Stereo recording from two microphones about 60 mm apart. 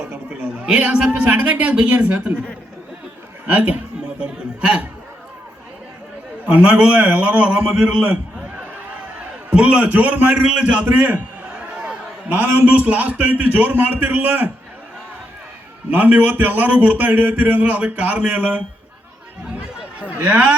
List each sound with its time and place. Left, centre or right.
0.0 s chatter: right
1.3 s a man's voice: right
3.4 s a sound: right
6.4 s a man's voice: right
9.5 s a man's voice: centre
10.8 s a man's voice: right
11.6 s a man's voice: centre
15.9 s a man's voice: right
19.5 s a sound: right